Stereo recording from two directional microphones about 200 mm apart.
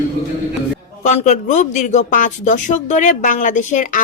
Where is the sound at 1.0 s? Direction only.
35° left (ahead or behind).